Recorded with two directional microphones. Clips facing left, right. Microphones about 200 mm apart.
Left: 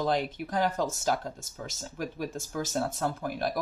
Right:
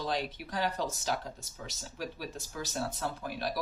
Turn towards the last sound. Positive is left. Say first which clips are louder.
# left 5 dB
turn(degrees=50)  # may be behind; listen again after turning